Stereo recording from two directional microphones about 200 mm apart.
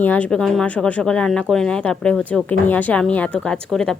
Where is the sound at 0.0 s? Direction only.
5° left (ahead or behind).